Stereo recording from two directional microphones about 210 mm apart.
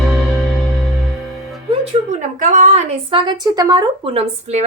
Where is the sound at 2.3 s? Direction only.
40° right (ahead or behind).